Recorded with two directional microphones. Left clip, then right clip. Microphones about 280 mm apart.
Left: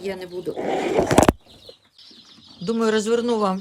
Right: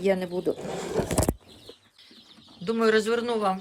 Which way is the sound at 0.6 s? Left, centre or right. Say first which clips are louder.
Left 9 dB; left.